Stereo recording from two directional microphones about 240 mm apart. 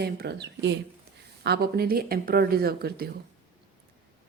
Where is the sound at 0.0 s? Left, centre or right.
Right.